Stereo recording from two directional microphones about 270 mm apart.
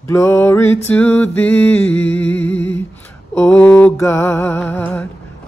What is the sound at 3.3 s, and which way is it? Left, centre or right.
Mantra, centre.